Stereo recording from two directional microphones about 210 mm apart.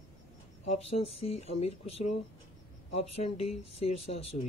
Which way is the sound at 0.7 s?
30° left (ahead or behind).